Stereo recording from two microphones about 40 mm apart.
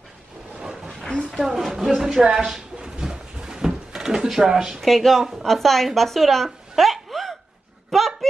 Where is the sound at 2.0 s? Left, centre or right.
Centre.